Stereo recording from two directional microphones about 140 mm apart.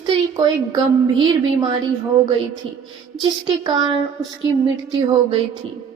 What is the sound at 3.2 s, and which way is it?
A woman's voice, 35° right (ahead or behind).